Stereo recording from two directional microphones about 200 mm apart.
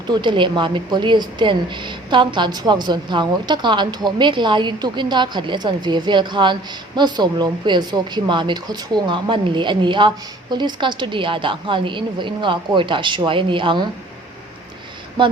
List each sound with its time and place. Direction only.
0.1 s a woman's voice: 25° right (ahead or behind)